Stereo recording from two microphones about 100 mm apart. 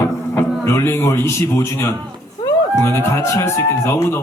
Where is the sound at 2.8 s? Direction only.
25° left (ahead or behind).